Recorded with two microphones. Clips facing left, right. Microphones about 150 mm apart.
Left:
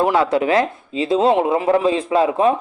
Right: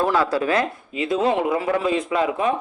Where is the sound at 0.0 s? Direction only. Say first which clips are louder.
Left 4 dB; 20° left (ahead or behind).